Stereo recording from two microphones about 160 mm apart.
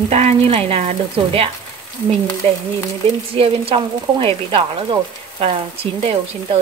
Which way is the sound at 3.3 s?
35° right (ahead or behind).